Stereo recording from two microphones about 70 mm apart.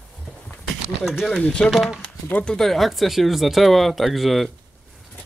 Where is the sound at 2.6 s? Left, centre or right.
Centre.